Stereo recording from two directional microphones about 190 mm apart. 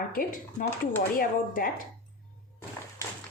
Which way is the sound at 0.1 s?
45° left (ahead or behind).